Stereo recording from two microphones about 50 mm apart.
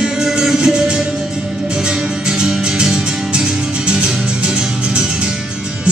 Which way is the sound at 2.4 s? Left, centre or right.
Centre.